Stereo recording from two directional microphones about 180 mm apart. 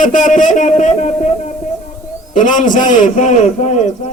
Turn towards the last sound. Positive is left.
turn(degrees=40)  # may be behind; listen again after turning